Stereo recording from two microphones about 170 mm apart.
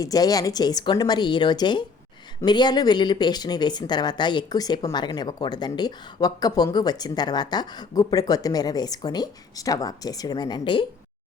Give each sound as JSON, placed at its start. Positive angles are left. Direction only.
{"t": 0.0, "sound": "speech", "side_deg": 20}